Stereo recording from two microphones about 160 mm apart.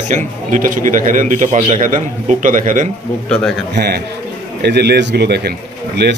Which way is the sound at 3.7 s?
90° right.